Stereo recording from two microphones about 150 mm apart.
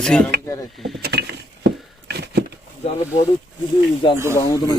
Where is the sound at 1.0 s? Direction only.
90° right.